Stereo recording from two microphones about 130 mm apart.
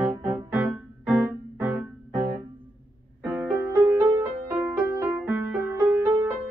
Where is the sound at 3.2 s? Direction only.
10° right (ahead or behind).